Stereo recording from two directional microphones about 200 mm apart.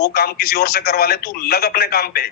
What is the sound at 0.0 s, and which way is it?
A man's voice, 50° left (ahead or behind).